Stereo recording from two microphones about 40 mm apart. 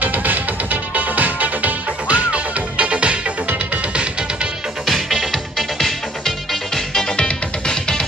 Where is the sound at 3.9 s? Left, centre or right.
Right.